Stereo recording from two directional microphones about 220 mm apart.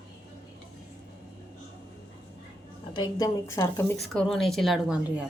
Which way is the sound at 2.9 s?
20° left (ahead or behind).